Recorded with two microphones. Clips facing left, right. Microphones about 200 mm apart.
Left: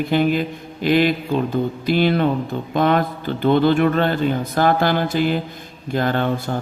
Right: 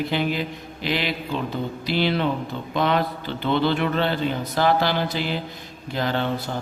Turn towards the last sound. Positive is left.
turn(degrees=50)  # may be behind; listen again after turning